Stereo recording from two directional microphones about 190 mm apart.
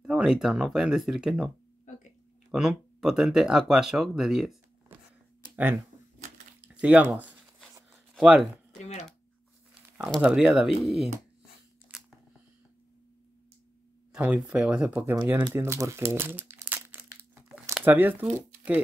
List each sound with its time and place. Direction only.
0.0 s speech: 5° right (ahead or behind)
1.9 s a sound: 40° left (ahead or behind)
2.5 s speech: 5° right (ahead or behind)
6.6 s a sound: 5° right (ahead or behind)
8.1 s speech: centre (ahead or behind)
9.9 s speech: 5° right (ahead or behind)
14.1 s speech: 5° right (ahead or behind)
15.5 s crumpling: 15° right (ahead or behind)
17.7 s speech: 10° right (ahead or behind)